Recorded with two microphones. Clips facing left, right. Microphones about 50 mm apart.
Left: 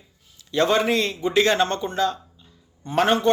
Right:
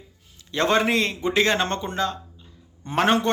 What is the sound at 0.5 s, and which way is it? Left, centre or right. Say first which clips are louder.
Speech: left 1 dB; right.